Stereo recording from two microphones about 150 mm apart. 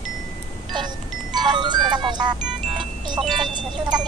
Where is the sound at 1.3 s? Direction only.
30° right (ahead or behind).